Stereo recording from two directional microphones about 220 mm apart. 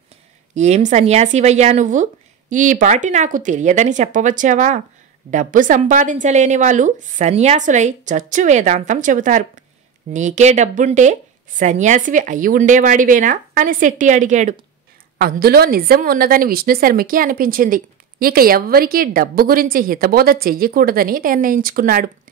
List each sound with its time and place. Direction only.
0.6 s a woman's voice: 30° right (ahead or behind)
15.1 s a woman's voice: 45° right (ahead or behind)